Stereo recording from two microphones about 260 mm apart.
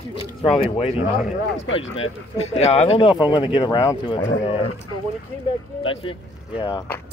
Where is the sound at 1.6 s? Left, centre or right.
Left.